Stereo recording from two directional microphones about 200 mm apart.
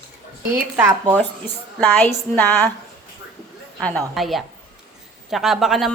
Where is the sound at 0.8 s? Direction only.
10° right (ahead or behind).